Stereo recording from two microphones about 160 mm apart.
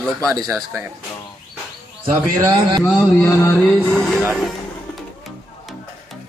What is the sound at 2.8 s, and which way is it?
Mantra, centre (ahead or behind).